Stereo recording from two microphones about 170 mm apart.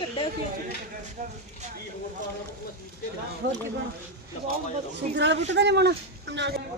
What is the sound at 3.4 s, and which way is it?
Speech, 75° right (ahead or behind).